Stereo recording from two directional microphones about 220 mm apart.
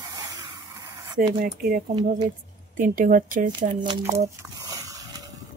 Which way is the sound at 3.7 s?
20° right (ahead or behind).